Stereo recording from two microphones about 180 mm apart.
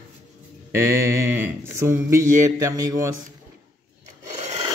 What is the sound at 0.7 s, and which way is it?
Speech, 15° right (ahead or behind).